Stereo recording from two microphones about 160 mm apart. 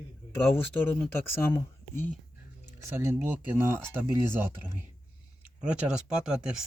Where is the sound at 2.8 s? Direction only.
15° right (ahead or behind).